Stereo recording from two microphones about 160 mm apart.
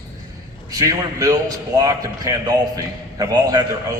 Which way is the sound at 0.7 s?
20° right (ahead or behind).